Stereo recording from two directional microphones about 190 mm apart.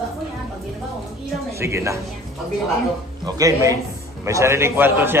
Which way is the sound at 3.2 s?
20° right (ahead or behind).